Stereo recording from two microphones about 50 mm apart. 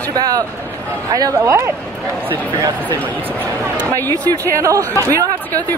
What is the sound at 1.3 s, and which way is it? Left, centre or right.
Speech, right.